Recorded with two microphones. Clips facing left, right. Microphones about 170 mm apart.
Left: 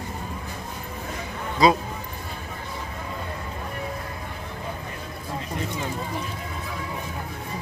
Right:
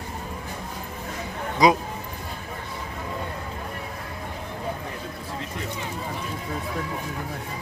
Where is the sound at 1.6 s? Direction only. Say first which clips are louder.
Even; 15° right (ahead or behind).